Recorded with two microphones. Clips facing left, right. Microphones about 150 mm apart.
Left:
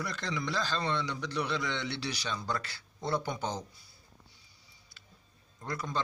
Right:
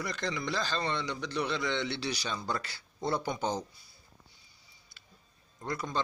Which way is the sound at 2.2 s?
10° right (ahead or behind).